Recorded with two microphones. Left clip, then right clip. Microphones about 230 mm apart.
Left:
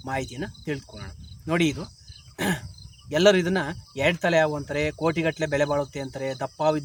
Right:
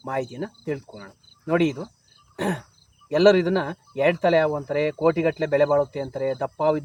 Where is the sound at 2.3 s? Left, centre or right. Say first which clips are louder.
Even; left.